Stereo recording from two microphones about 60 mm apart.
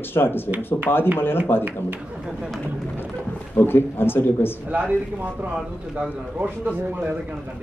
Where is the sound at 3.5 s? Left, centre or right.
Left.